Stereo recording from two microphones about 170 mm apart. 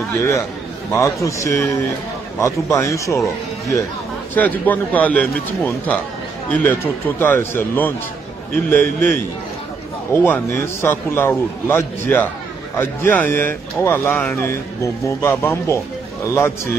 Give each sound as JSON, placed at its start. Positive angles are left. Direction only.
{"t": 0.9, "sound": "a man's voice", "side_deg": 15}